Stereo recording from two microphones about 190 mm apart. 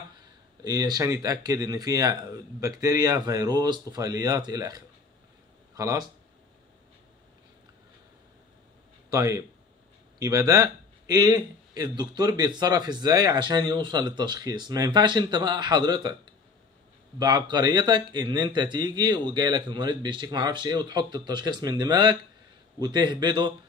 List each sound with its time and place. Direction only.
0.7 s speech: 20° right (ahead or behind)
10.1 s speech: 20° right (ahead or behind)
17.2 s speech: 20° right (ahead or behind)